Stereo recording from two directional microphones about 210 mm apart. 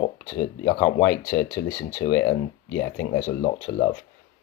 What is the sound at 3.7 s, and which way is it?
Speech, 55° left (ahead or behind).